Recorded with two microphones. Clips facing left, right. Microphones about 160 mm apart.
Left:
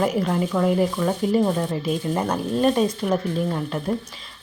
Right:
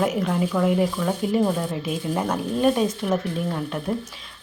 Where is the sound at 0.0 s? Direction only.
Centre (ahead or behind).